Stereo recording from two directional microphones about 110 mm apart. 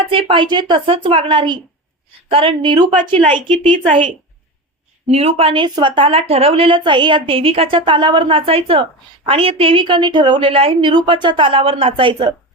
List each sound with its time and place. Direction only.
0.1 s a woman's voice: 50° right (ahead or behind)
5.0 s a woman's voice: 70° right (ahead or behind); by 12.3 s 50° right (ahead or behind)